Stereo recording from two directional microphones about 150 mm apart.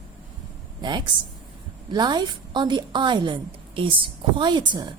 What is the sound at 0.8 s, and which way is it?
A woman's voice, 30° right (ahead or behind).